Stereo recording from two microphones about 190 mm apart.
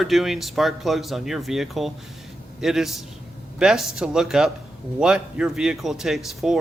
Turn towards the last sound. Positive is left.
turn(degrees=0)  # may be behind; listen again after turning